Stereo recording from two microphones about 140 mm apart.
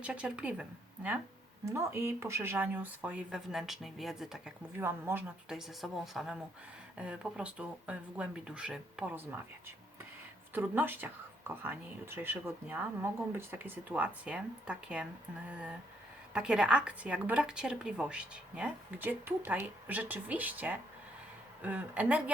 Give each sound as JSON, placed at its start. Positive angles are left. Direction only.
{"t": 0.0, "sound": "speech", "side_deg": -10}
{"t": 1.6, "sound": "speech", "side_deg": -20}
{"t": 4.8, "sound": "speech", "side_deg": -15}
{"t": 5.5, "sound": "speech", "side_deg": 0}
{"t": 10.5, "sound": "speech", "side_deg": -15}
{"t": 16.3, "sound": "speech", "side_deg": -5}